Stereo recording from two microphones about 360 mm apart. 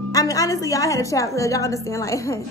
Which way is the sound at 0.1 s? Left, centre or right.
Centre.